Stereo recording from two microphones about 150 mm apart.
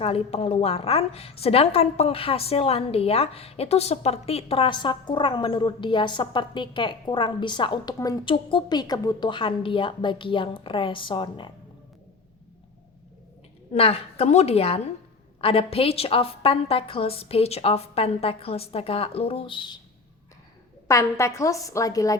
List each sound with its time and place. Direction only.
0.0 s a woman's voice: 40° left (ahead or behind)
13.7 s a woman's voice: 40° left (ahead or behind)
20.8 s a woman's voice: 20° left (ahead or behind)